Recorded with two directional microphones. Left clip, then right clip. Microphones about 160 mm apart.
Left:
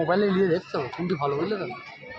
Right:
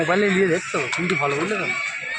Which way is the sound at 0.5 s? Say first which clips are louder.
Right 3 dB; 30° right (ahead or behind).